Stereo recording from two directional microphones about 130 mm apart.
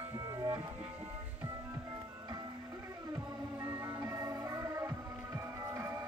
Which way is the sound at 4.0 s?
25° right (ahead or behind).